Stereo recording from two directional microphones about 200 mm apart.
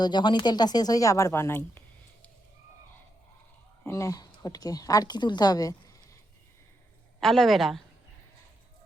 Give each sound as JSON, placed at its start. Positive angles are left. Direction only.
{"t": 0.0, "sound": "speech", "side_deg": 20}
{"t": 3.8, "sound": "speech", "side_deg": 15}
{"t": 7.2, "sound": "a woman's voice", "side_deg": 0}